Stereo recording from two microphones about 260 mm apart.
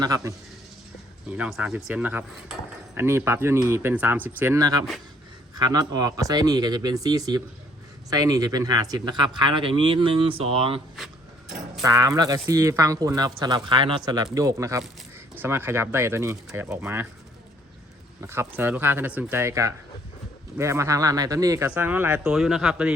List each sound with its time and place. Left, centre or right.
0.0 s speech: centre
10.9 s a sound: centre
11.8 s speech: centre
18.2 s speech: centre